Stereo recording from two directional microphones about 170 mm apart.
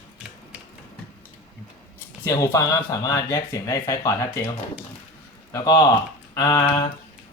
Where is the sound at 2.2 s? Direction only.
20° left (ahead or behind).